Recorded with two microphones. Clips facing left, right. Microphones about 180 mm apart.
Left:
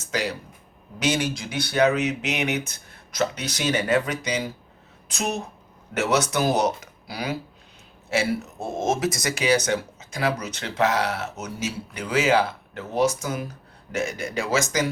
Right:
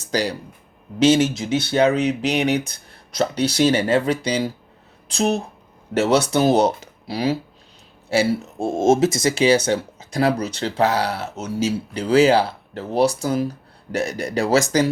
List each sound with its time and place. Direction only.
0.0 s speech: 35° right (ahead or behind)